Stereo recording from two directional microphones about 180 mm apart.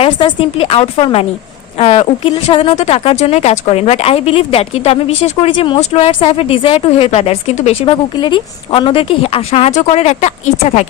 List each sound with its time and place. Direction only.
0.0 s speech: 30° left (ahead or behind)